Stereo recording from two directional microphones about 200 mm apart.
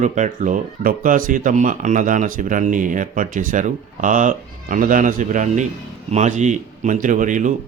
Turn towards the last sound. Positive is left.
turn(degrees=-40)  # may be behind; listen again after turning